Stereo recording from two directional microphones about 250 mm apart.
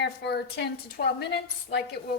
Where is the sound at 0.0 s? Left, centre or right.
Left.